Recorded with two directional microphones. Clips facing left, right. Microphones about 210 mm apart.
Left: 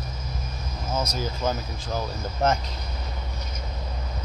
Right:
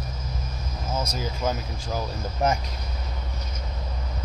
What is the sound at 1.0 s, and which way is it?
Speech, 5° right (ahead or behind).